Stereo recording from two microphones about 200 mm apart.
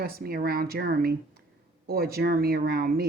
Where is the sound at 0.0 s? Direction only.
50° right (ahead or behind).